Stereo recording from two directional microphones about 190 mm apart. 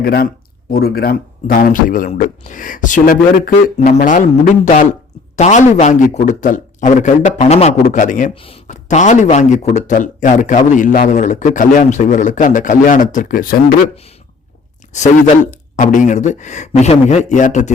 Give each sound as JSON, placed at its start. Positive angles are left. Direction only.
{"t": 0.0, "sound": "speech", "side_deg": 55}
{"t": 8.4, "sound": "speech", "side_deg": 30}
{"t": 14.9, "sound": "speech", "side_deg": 40}